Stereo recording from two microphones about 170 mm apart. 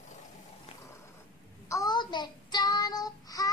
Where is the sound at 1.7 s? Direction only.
20° left (ahead or behind).